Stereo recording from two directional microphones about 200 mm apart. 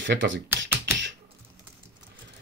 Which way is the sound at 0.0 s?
65° right (ahead or behind).